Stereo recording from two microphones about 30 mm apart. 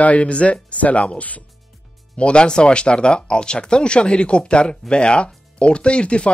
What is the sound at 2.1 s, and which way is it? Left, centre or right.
Speech, left.